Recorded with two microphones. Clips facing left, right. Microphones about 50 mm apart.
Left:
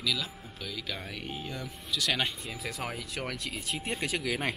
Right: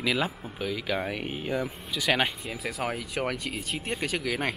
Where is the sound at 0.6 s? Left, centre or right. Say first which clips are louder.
Right 9 dB; centre.